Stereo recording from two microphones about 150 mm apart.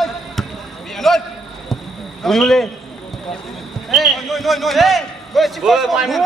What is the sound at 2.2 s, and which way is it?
Speech, centre (ahead or behind).